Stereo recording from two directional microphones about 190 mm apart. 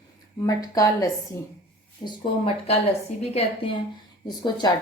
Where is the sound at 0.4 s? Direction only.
20° left (ahead or behind).